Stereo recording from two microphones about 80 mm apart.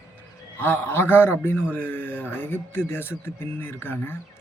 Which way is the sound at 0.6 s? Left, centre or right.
Left.